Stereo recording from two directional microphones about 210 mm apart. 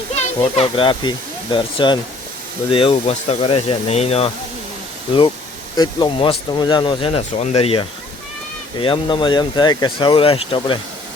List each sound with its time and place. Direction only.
0.2 s speech: 30° left (ahead or behind)
5.7 s speech: 20° left (ahead or behind)